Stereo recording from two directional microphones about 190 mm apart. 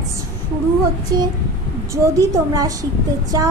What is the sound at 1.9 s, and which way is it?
A child's voice, 20° right (ahead or behind).